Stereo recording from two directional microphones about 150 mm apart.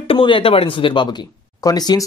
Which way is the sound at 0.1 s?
35° left (ahead or behind).